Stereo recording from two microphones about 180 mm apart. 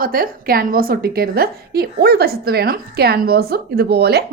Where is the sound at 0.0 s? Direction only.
55° right (ahead or behind).